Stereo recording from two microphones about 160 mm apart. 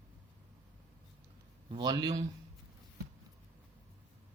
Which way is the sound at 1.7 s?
25° right (ahead or behind).